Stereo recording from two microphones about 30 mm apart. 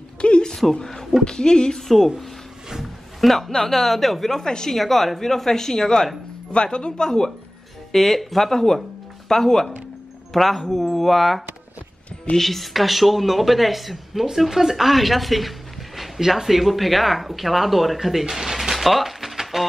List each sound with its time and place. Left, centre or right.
0.2 s a sound: left
1.2 s speech: left
2.8 s a sound: centre
3.5 s speech: centre
4.3 s speech: centre
4.7 s a woman's voice: centre
6.5 s speech: left
7.9 s speech: centre
9.3 s a woman's voice: centre
18.3 s music: centre